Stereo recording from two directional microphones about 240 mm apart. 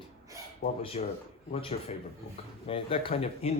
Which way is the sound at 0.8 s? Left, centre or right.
Left.